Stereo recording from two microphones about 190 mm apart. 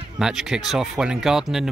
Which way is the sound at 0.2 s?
Centre (ahead or behind).